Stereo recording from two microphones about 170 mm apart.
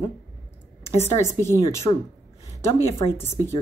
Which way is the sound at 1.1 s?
15° left (ahead or behind).